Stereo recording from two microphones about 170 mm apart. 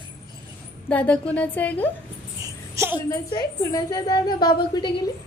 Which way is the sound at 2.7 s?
15° right (ahead or behind).